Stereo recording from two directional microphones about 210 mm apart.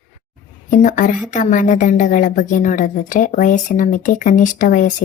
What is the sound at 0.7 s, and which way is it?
A woman's voice, 35° left (ahead or behind).